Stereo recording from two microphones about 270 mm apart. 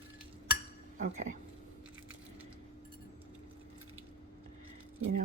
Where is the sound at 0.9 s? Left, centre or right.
Right.